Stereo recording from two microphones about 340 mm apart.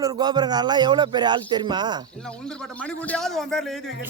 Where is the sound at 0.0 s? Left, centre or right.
Centre.